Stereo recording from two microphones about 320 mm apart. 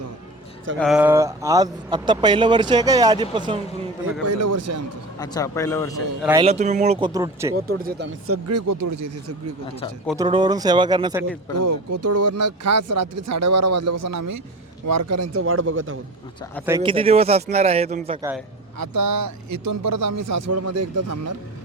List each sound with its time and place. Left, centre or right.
0.8 s speech: centre
4.3 s speech: right
5.2 s speech: centre
6.4 s speech: right
7.8 s speech: right
8.4 s speech: right
10.2 s speech: centre
11.5 s speech: right
16.6 s speech: centre
18.8 s speech: right
20.0 s speech: right